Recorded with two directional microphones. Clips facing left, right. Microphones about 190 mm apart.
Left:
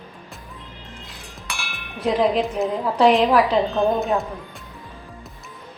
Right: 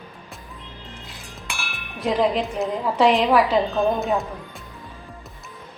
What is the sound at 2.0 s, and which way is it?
A woman's voice, centre (ahead or behind).